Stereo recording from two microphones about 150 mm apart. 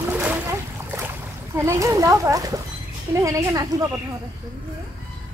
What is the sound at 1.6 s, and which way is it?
A child's voice, 20° right (ahead or behind).